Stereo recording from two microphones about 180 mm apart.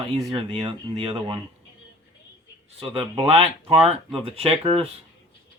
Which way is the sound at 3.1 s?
30° right (ahead or behind).